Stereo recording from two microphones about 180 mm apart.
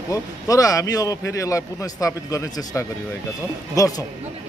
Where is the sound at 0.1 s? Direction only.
20° left (ahead or behind).